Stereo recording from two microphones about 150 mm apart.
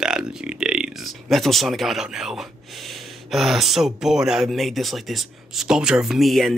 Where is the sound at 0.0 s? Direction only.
5° right (ahead or behind).